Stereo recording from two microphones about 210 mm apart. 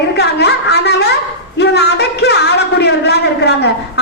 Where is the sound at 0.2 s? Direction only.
50° left (ahead or behind).